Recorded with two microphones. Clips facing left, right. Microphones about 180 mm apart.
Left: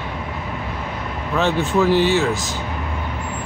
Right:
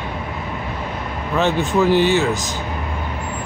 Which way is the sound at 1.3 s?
Centre (ahead or behind).